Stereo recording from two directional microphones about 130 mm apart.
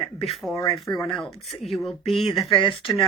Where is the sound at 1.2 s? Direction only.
Centre (ahead or behind).